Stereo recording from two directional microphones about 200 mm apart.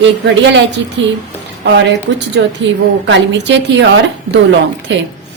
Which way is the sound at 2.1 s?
65° right (ahead or behind).